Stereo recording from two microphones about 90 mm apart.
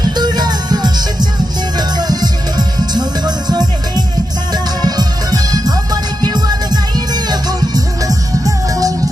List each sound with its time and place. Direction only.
0.0 s music: 50° right (ahead or behind)